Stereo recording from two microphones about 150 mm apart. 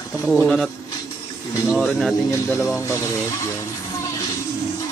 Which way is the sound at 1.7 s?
Centre (ahead or behind).